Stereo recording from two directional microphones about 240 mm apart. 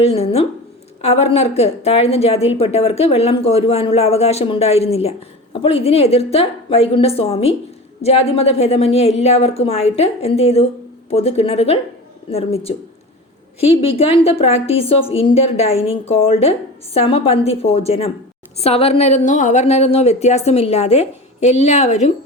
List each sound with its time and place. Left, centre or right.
0.0 s a woman's voice: left